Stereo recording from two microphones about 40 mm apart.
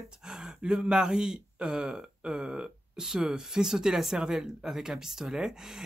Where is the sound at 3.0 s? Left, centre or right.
Centre.